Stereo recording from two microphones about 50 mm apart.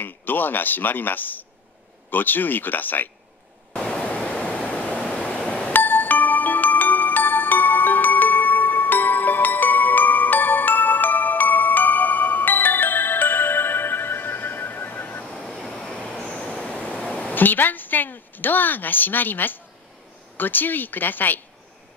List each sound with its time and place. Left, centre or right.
0.0 s speech: left
3.7 s pink noise: centre
5.7 s music: left
15.3 s vehicle: centre
16.2 s train: centre
17.3 s a woman's voice: left